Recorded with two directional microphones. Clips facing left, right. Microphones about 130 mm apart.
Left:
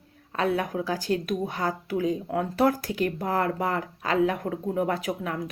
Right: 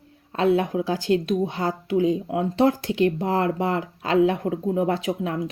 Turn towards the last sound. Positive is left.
turn(degrees=-30)  # may be behind; listen again after turning